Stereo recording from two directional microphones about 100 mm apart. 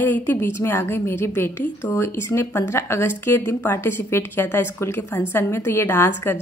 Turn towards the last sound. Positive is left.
turn(degrees=25)  # may be behind; listen again after turning